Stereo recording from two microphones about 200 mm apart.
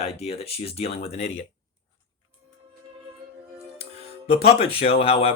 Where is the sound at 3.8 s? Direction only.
30° left (ahead or behind).